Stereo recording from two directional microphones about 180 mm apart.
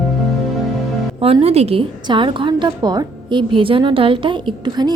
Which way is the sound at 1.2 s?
30° right (ahead or behind).